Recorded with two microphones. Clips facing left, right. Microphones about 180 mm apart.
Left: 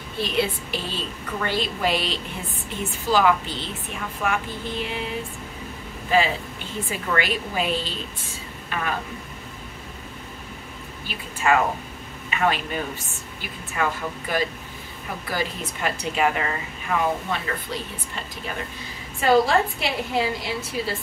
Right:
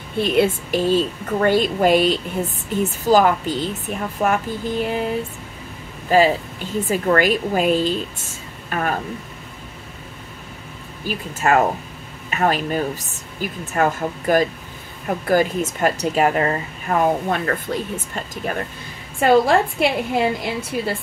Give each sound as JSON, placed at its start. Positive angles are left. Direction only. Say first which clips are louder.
{"t": 0.2, "sound": "speech", "louder": "right 7 dB", "side_deg": -55}
{"t": 11.1, "sound": "a woman's voice", "louder": "right 3 dB", "side_deg": -45}